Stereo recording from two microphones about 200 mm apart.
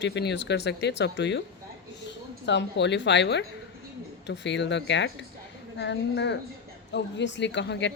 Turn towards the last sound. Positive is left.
turn(degrees=60)  # may be behind; listen again after turning